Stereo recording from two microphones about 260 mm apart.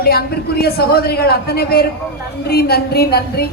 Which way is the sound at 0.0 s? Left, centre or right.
Left.